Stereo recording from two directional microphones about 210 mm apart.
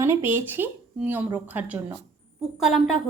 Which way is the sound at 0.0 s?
10° right (ahead or behind).